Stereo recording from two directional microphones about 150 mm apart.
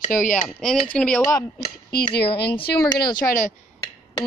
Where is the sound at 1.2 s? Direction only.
25° left (ahead or behind).